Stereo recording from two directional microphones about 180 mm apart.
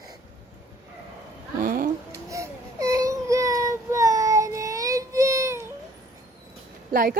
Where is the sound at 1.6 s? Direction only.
50° right (ahead or behind).